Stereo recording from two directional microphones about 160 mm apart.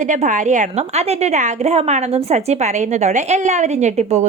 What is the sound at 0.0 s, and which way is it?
A woman's voice, 50° right (ahead or behind).